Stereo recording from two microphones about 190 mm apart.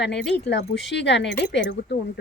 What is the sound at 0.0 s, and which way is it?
Speech, 60° left (ahead or behind).